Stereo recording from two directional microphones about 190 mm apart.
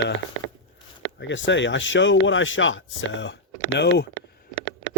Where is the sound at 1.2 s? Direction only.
70° left (ahead or behind).